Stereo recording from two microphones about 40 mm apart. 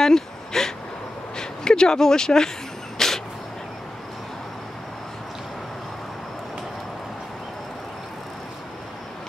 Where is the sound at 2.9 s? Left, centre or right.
Centre.